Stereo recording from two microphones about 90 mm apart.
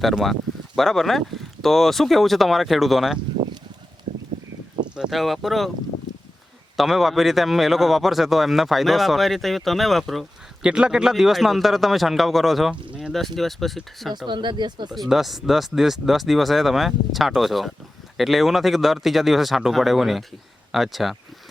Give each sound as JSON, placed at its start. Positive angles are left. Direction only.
{"t": 0.0, "sound": "a man's voice", "side_deg": 0}
{"t": 4.9, "sound": "a man's voice", "side_deg": -5}
{"t": 6.7, "sound": "a man's voice", "side_deg": 0}
{"t": 14.3, "sound": "speech", "side_deg": -60}
{"t": 14.8, "sound": "a man's voice", "side_deg": 0}